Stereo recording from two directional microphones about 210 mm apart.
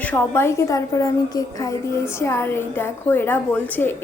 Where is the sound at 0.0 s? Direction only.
10° left (ahead or behind).